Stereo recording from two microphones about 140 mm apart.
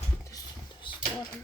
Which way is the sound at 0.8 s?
35° left (ahead or behind).